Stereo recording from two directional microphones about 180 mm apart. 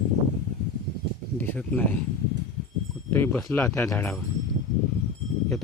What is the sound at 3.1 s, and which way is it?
Speech, 10° left (ahead or behind).